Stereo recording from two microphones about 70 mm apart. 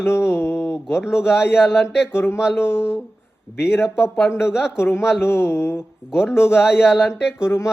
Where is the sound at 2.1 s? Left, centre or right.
Left.